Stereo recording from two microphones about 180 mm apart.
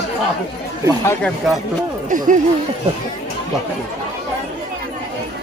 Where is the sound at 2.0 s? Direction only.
45° right (ahead or behind).